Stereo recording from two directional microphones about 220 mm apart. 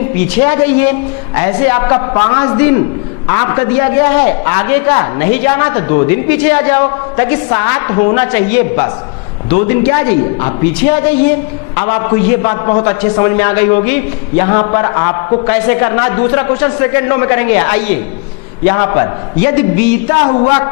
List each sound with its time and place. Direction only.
0.4 s a man's voice: 10° left (ahead or behind)
20.1 s a man's voice: 30° left (ahead or behind)